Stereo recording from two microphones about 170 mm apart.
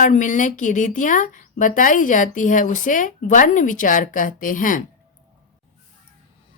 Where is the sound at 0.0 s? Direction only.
50° left (ahead or behind).